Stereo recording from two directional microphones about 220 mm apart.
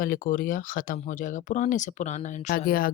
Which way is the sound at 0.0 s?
40° left (ahead or behind).